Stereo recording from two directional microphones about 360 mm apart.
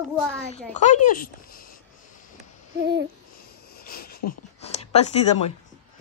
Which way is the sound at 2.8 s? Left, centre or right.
Right.